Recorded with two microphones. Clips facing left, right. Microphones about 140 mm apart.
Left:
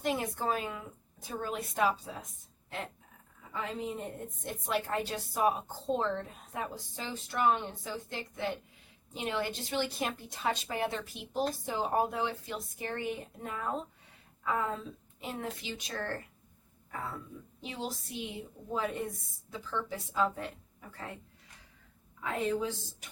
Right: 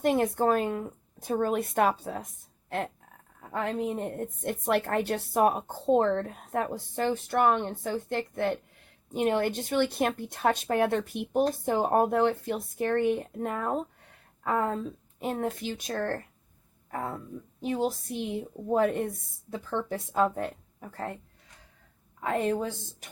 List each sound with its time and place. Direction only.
0.0 s a woman's voice: 55° right (ahead or behind)
22.2 s a woman's voice: 50° right (ahead or behind)